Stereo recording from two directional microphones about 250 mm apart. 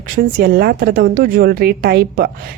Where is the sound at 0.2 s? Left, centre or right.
Right.